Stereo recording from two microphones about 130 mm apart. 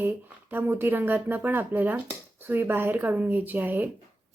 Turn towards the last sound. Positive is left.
turn(degrees=-15)  # may be behind; listen again after turning